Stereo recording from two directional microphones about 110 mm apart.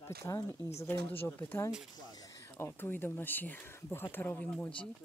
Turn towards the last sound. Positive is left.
turn(degrees=10)  # may be behind; listen again after turning